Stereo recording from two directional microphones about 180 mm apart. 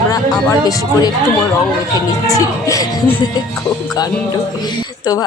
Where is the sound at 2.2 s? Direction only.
20° left (ahead or behind).